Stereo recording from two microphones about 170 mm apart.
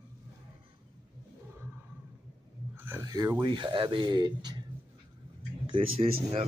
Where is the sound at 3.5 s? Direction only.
30° right (ahead or behind).